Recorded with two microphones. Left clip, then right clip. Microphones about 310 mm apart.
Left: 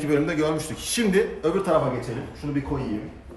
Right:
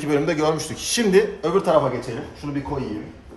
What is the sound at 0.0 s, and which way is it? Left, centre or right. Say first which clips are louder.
A man's voice: right 3 dB; right.